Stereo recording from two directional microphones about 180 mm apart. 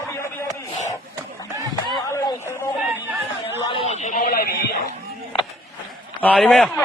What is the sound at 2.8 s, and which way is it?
Chatter, 10° right (ahead or behind).